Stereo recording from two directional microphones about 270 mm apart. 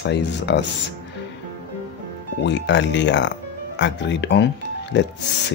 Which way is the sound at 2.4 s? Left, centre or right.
Left.